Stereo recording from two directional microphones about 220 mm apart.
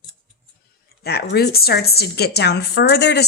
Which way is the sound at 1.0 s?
45° left (ahead or behind).